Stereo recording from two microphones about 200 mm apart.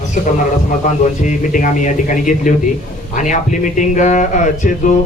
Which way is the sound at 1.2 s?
40° left (ahead or behind).